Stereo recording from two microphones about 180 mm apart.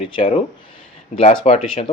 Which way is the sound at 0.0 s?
30° left (ahead or behind).